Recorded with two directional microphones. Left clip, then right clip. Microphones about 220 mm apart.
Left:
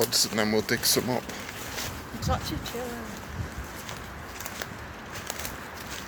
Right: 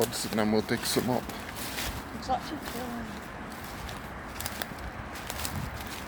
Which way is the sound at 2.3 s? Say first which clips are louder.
Right 1 dB; 35° left (ahead or behind).